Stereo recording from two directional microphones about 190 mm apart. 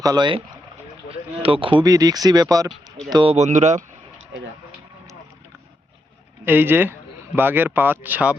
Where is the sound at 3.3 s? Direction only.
40° right (ahead or behind).